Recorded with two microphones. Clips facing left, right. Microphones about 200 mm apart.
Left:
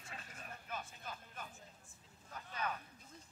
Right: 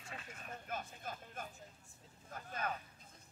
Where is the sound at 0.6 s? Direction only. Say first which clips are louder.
Right 2 dB; 45° right (ahead or behind).